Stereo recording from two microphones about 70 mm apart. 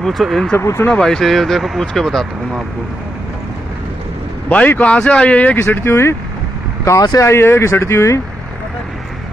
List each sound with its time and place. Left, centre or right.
0.0 s speech: centre
0.6 s speech: left
0.9 s speech: centre
4.5 s speech: left
5.6 s speech: left
6.8 s speech: left
7.2 s speech: left